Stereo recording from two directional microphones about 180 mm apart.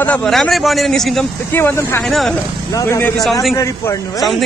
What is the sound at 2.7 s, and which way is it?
Speech, 15° left (ahead or behind).